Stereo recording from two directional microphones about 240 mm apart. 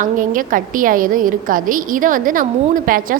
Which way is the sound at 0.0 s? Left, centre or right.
Right.